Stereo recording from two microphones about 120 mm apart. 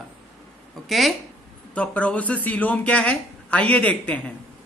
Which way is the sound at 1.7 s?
10° left (ahead or behind).